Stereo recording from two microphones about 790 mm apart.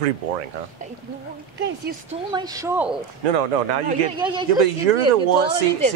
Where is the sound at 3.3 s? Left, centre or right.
Right.